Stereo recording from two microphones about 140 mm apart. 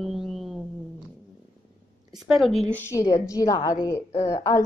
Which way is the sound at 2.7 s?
20° left (ahead or behind).